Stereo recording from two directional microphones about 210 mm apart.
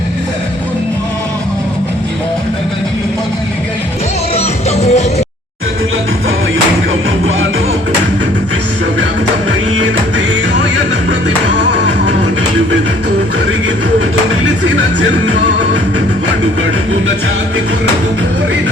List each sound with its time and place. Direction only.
4.4 s music: 30° left (ahead or behind)
10.2 s music: 60° right (ahead or behind)
11.7 s music: 60° right (ahead or behind)
15.3 s music: 60° right (ahead or behind)